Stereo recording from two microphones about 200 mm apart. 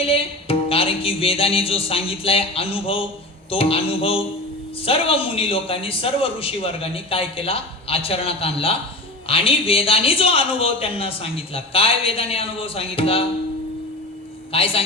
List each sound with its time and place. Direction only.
0.0 s a man's voice: 30° left (ahead or behind)
14.5 s a man's voice: 30° left (ahead or behind)